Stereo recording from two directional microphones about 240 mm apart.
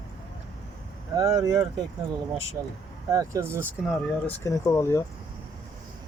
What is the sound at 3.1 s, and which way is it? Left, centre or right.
Speech, centre.